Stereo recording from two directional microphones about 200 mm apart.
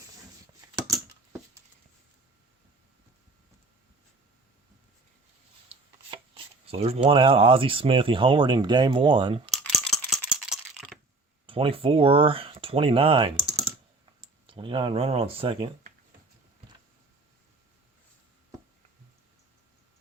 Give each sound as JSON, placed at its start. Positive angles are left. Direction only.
{"t": 5.6, "sound": "speech", "side_deg": -25}
{"t": 9.5, "sound": "rattle", "side_deg": 0}
{"t": 10.2, "sound": "a sound", "side_deg": -5}
{"t": 11.4, "sound": "speech", "side_deg": -25}